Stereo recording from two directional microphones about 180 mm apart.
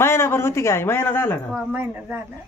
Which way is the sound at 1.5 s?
10° right (ahead or behind).